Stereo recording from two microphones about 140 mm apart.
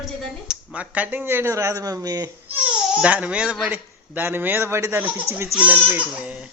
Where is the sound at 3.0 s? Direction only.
10° right (ahead or behind).